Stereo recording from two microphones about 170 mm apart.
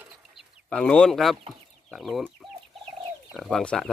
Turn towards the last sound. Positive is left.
turn(degrees=5)  # may be behind; listen again after turning